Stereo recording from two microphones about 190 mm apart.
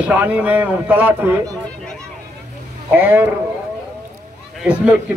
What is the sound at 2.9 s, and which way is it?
Speech, 10° right (ahead or behind).